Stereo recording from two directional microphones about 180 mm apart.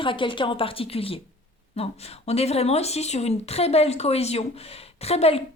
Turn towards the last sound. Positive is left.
turn(degrees=35)  # may be behind; listen again after turning